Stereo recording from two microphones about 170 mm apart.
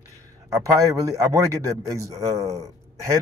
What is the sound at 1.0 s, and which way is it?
Speech, 20° right (ahead or behind).